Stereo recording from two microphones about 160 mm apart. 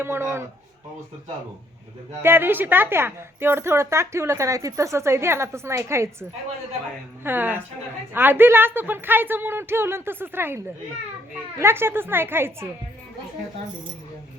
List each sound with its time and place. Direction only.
0.0 s a woman's voice: 15° right (ahead or behind)
2.2 s a woman's voice: 15° right (ahead or behind)
7.3 s a woman's voice: 10° right (ahead or behind)
11.6 s a woman's voice: 15° right (ahead or behind)